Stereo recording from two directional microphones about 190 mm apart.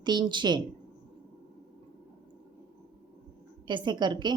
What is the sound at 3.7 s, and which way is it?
Speech, 25° right (ahead or behind).